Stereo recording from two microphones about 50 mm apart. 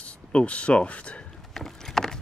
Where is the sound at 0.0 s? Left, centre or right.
Left.